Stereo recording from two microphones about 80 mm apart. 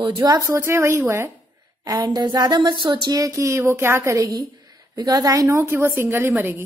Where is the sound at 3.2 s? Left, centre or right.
Right.